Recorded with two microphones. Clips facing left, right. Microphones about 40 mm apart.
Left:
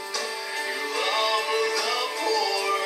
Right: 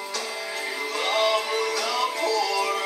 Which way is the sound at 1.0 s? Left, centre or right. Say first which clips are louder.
Right 2 dB; right.